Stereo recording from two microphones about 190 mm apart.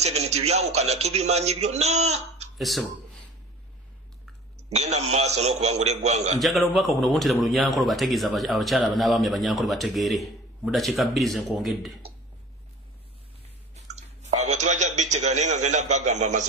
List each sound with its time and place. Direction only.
0.0 s a man's voice: 35° right (ahead or behind)
2.6 s speech: centre (ahead or behind)
4.7 s a man's voice: 35° right (ahead or behind)
6.4 s speech: centre (ahead or behind)
13.7 s a sound: 35° right (ahead or behind)